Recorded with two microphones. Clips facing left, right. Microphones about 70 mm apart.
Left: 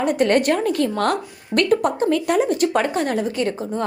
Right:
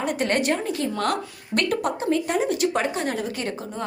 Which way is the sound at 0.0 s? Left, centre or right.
Left.